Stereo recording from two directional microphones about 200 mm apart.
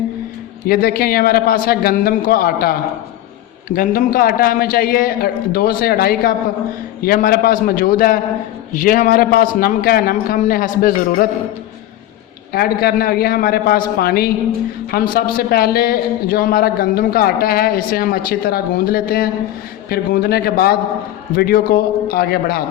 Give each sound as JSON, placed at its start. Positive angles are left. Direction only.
{"t": 0.7, "sound": "speech", "side_deg": 45}
{"t": 12.5, "sound": "speech", "side_deg": 50}